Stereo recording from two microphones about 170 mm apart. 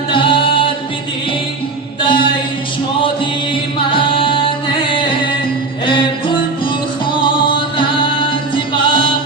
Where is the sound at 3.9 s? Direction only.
30° left (ahead or behind).